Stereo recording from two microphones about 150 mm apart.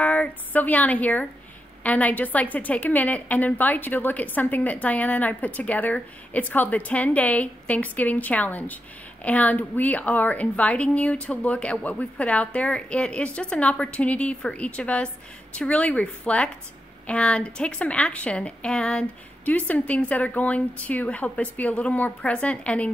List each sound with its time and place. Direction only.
0.0 s a woman's voice: 10° left (ahead or behind)